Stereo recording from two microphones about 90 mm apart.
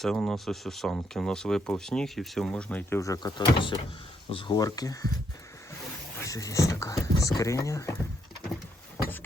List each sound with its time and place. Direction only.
0.0 s speech: 5° left (ahead or behind)
3.0 s speech: 40° left (ahead or behind)
3.3 s speech: 65° left (ahead or behind)
4.3 s speech: 90° left
4.5 s speech: 45° left (ahead or behind)
6.2 s speech: 40° left (ahead or behind)